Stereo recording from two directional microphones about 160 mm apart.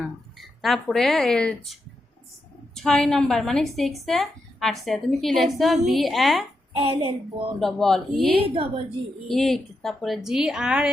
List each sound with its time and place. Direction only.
0.3 s a woman's voice: centre (ahead or behind)
6.7 s a woman's voice: 35° right (ahead or behind)
7.6 s a woman's voice: centre (ahead or behind)
8.4 s a woman's voice: 35° right (ahead or behind)
9.2 s a woman's voice: centre (ahead or behind)